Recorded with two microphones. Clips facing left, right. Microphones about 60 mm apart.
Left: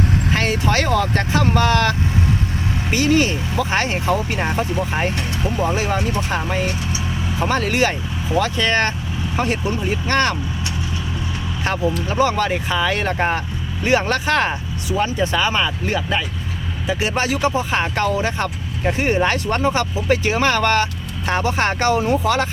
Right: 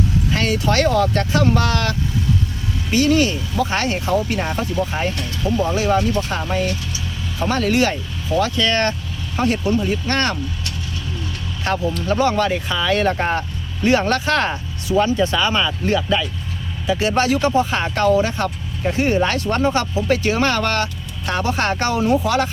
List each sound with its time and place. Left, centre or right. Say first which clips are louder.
0.3 s speech: right 1 dB; left
11.6 s speech: even; centre